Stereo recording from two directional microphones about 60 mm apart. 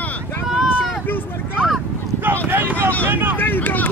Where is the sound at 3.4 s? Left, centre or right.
Left.